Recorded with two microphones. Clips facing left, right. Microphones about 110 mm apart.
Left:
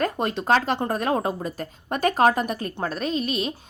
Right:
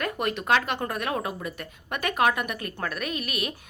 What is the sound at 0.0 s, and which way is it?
A woman's voice, 30° left (ahead or behind).